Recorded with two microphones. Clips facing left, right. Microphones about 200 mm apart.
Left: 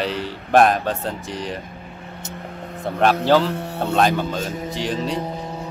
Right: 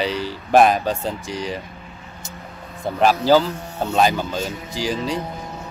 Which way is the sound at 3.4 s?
60° left (ahead or behind).